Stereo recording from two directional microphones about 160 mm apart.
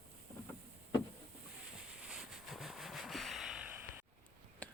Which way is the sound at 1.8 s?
5° right (ahead or behind).